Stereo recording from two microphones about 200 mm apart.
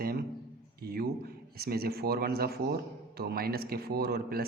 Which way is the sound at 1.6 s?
50° right (ahead or behind).